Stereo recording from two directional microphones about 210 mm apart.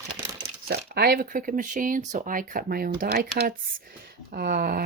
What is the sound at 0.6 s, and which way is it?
Speech, 50° right (ahead or behind).